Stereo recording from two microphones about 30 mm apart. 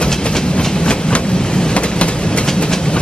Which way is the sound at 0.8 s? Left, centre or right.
Left.